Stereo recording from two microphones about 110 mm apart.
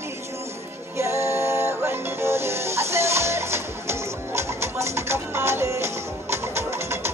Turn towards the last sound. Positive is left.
turn(degrees=-25)  # may be behind; listen again after turning